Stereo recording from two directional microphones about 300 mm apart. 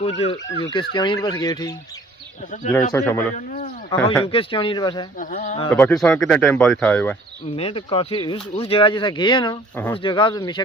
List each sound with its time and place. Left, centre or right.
0.0 s speech: centre
2.7 s speech: centre
3.3 s speech: left
3.8 s speech: centre
5.2 s speech: left
5.7 s speech: centre
7.4 s speech: centre